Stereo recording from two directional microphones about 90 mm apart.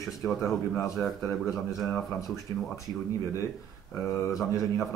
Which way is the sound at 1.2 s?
35° left (ahead or behind).